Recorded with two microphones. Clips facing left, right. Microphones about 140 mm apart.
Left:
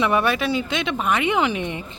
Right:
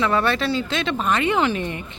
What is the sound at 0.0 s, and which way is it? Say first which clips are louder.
Speech: even; 15° left (ahead or behind).